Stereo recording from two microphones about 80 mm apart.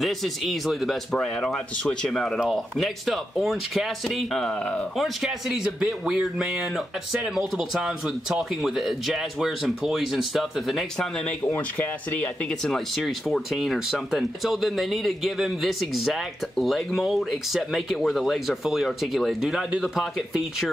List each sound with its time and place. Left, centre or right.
0.0 s speech: centre
4.9 s speech: centre
12.4 s speech: centre